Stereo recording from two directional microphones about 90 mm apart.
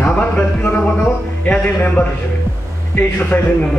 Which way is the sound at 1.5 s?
15° left (ahead or behind).